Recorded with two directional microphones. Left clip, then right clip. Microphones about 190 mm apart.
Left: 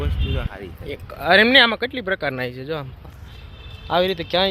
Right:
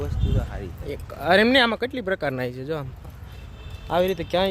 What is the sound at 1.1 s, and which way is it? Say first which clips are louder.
Speech: left 4 dB; 10° right (ahead or behind).